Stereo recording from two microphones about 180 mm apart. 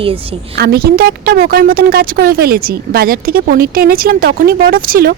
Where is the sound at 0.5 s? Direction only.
60° right (ahead or behind).